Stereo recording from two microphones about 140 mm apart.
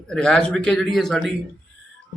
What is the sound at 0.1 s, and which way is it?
Speech, 5° left (ahead or behind).